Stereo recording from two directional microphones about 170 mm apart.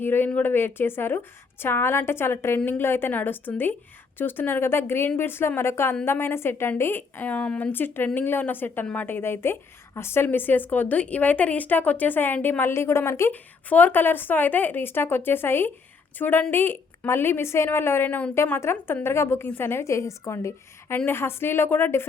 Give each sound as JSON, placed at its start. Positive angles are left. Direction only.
{"t": 0.0, "sound": "a woman's voice", "side_deg": 10}